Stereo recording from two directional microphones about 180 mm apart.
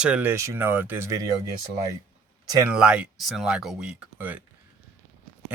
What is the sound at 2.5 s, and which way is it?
Speech, 15° right (ahead or behind).